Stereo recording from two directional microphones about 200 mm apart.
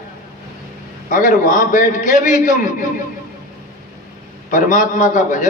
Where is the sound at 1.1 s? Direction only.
40° left (ahead or behind).